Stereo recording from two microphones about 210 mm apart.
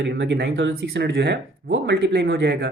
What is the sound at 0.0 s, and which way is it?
Speech, 55° right (ahead or behind).